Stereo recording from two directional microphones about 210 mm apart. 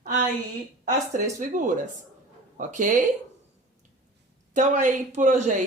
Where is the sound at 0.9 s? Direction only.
40° right (ahead or behind).